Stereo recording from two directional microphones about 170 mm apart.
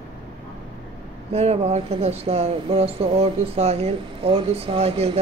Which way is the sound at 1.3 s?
40° right (ahead or behind).